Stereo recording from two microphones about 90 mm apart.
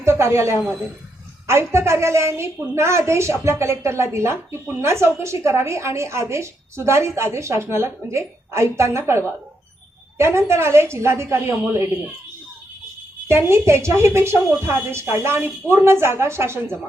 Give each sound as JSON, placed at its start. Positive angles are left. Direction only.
{"t": 0.0, "sound": "a woman's voice", "side_deg": -30}
{"t": 13.2, "sound": "a woman's voice", "side_deg": -30}